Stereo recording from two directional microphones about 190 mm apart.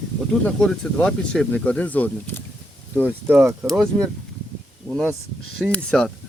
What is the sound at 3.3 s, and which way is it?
Speech, 10° right (ahead or behind).